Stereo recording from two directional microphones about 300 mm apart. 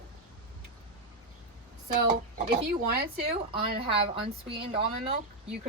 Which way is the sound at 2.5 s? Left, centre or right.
Right.